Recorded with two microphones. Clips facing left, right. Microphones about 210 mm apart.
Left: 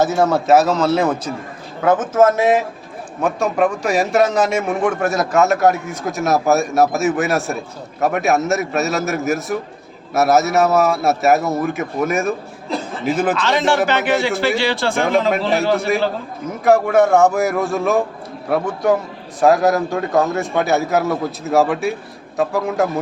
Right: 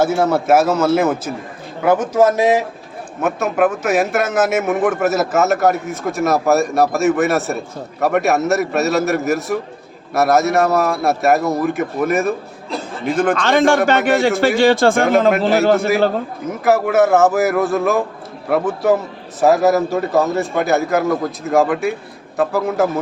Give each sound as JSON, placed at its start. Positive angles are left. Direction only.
{"t": 0.0, "sound": "a man's voice", "side_deg": -10}
{"t": 13.4, "sound": "a man's voice", "side_deg": -50}
{"t": 16.6, "sound": "a man's voice", "side_deg": -5}